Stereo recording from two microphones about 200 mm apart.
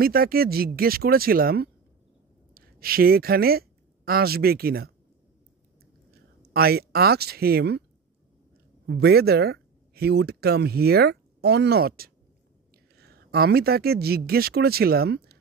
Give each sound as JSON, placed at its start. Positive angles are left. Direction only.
{"t": 0.0, "sound": "a woman's voice", "side_deg": -50}
{"t": 6.5, "sound": "speech", "side_deg": -50}
{"t": 8.8, "sound": "speech", "side_deg": -55}